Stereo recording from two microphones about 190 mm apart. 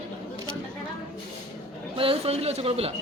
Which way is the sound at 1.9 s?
30° right (ahead or behind).